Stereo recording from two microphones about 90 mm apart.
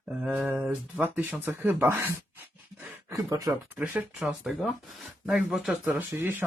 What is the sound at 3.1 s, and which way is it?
Speech, 40° right (ahead or behind).